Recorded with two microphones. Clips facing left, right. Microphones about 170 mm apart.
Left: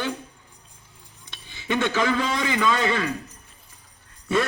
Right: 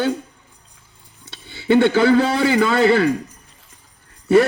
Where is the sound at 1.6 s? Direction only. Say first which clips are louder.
Right 9 dB; 30° right (ahead or behind).